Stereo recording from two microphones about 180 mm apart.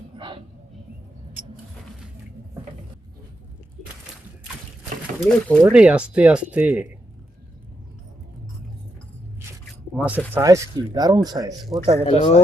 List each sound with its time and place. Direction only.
5.2 s speech: centre (ahead or behind)
10.0 s speech: 10° right (ahead or behind)
12.0 s speech: 35° left (ahead or behind)